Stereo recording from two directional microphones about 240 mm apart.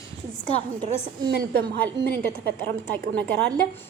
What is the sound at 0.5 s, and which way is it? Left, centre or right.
Speech, left.